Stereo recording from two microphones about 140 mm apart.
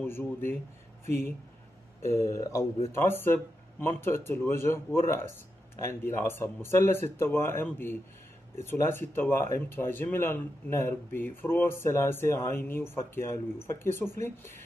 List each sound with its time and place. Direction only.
0.0 s speech: 15° left (ahead or behind)
2.0 s speech: 20° left (ahead or behind)